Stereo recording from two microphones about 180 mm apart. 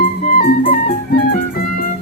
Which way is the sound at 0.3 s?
50° left (ahead or behind).